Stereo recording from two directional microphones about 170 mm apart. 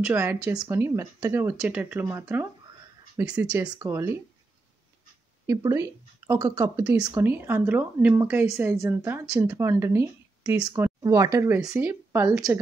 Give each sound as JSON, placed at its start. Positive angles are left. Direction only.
{"t": 0.1, "sound": "speech", "side_deg": -15}
{"t": 3.7, "sound": "speech", "side_deg": -20}
{"t": 5.5, "sound": "speech", "side_deg": -15}